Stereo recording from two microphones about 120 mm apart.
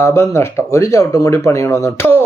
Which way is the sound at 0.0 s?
20° left (ahead or behind).